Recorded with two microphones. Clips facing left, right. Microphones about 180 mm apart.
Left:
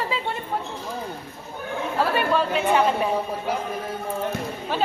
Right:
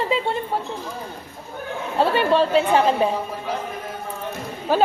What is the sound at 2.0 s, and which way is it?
A woman's voice, 25° right (ahead or behind).